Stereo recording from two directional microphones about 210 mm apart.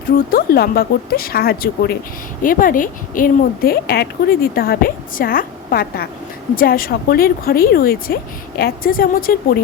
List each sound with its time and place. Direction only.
0.3 s a woman's voice: 45° left (ahead or behind)